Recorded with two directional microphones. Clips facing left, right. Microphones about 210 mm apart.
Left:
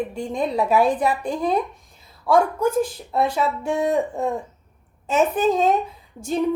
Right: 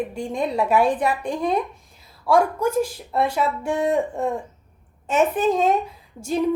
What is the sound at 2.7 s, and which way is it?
Speech, centre (ahead or behind).